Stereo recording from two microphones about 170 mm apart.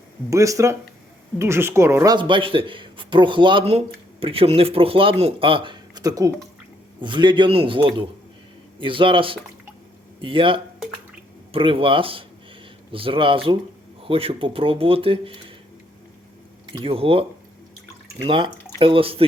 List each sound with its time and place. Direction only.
0.3 s a man's voice: 20° right (ahead or behind)
2.1 s a man's voice: 30° right (ahead or behind)
16.7 s speech: 35° right (ahead or behind)
18.3 s speech: 30° right (ahead or behind)